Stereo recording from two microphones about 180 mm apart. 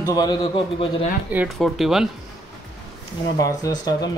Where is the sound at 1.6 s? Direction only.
Centre (ahead or behind).